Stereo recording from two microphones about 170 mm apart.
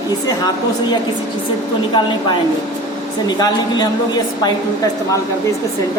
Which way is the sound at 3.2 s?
25° left (ahead or behind).